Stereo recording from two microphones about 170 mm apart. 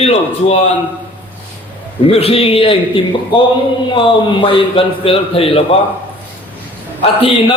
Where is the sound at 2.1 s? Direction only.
35° left (ahead or behind).